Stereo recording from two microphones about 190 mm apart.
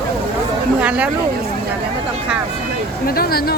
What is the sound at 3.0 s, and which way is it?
Speech, 50° left (ahead or behind).